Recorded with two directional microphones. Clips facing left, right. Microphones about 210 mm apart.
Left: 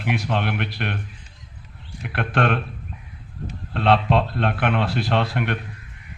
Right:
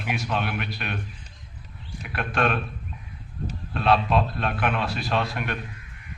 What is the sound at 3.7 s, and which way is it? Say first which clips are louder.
A man's voice: left 3 dB; 65° left (ahead or behind).